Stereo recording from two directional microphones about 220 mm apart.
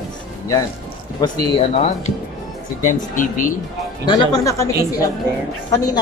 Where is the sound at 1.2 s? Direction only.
30° left (ahead or behind).